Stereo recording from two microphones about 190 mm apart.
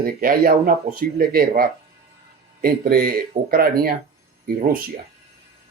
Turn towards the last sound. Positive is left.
turn(degrees=-50)  # may be behind; listen again after turning